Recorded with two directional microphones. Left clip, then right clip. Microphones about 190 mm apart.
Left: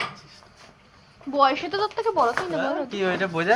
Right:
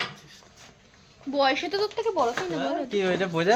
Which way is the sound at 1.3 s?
15° right (ahead or behind).